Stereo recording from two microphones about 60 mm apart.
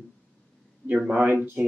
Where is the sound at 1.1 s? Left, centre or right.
Right.